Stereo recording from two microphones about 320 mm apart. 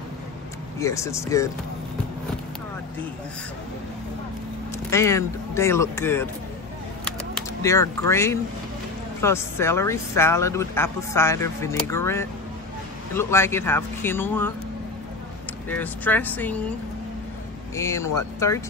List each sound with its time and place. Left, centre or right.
0.7 s speech: centre
4.9 s speech: centre
7.6 s speech: centre
15.7 s speech: centre
17.7 s speech: centre